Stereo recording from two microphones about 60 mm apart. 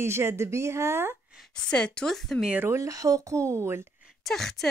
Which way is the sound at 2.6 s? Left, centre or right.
Right.